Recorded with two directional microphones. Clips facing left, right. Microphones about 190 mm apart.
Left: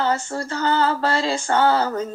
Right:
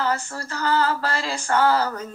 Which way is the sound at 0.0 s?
25° left (ahead or behind).